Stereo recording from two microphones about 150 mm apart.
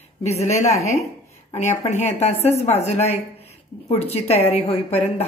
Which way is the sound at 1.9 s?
45° left (ahead or behind).